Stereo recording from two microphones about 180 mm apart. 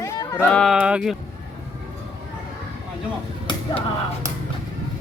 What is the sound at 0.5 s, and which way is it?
Speech, centre (ahead or behind).